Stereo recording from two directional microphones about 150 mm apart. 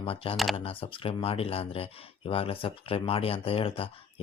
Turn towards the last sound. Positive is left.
turn(degrees=40)  # may be behind; listen again after turning